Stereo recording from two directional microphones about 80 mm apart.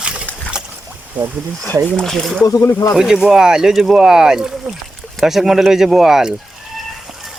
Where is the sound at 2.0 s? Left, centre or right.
Centre.